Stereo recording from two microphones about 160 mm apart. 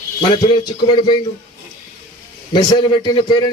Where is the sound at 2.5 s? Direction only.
25° left (ahead or behind).